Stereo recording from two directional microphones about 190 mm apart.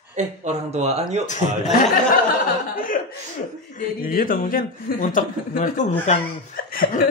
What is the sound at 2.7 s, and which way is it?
Speech, 45° left (ahead or behind).